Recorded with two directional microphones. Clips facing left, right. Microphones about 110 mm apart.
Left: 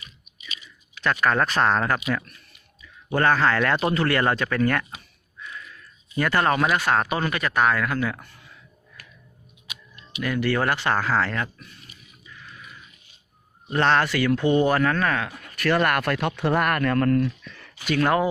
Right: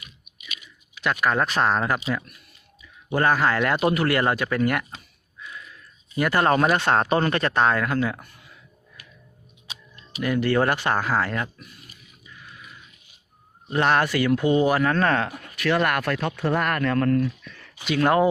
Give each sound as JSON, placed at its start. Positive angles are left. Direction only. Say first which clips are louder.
{"t": 0.3, "sound": "chewing", "louder": "left 1 dB", "side_deg": -55}
{"t": 0.9, "sound": "speech", "louder": "left 1 dB", "side_deg": -10}
{"t": 2.1, "sound": "a man's voice", "louder": "left 1 dB", "side_deg": -25}
{"t": 6.1, "sound": "a man's voice", "louder": "even", "side_deg": -20}
{"t": 6.4, "sound": "speech", "louder": "right 3 dB", "side_deg": -35}
{"t": 6.7, "sound": "a man's voice", "louder": "right 2 dB", "side_deg": -25}
{"t": 9.6, "sound": "speech", "louder": "even", "side_deg": -35}
{"t": 13.7, "sound": "a man's voice", "louder": "even", "side_deg": -15}
{"t": 14.3, "sound": "speech", "louder": "even", "side_deg": -10}
{"t": 14.9, "sound": "speech", "louder": "right 3 dB", "side_deg": -35}
{"t": 15.5, "sound": "speech", "louder": "left 1 dB", "side_deg": 0}
{"t": 17.9, "sound": "a man's voice", "louder": "right 2 dB", "side_deg": -25}